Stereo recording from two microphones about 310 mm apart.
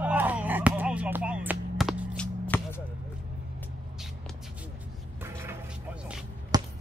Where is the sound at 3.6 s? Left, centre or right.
Centre.